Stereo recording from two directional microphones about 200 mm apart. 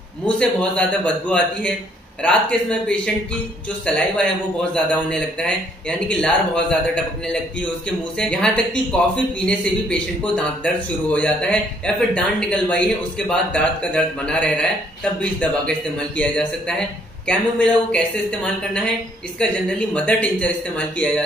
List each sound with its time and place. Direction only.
0.4 s speech: 5° left (ahead or behind)
8.2 s speech: 5° left (ahead or behind)